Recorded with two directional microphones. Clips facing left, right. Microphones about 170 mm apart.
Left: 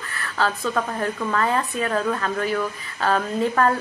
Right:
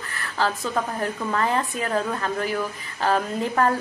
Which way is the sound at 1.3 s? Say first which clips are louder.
Even; 20° right (ahead or behind).